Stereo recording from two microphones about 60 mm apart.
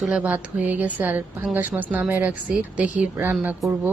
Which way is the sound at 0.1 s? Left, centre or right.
Centre.